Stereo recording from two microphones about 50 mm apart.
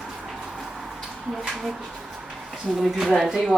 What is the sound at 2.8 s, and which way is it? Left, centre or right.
Speech, centre.